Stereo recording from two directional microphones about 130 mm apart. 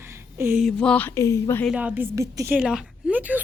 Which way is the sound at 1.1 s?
25° left (ahead or behind).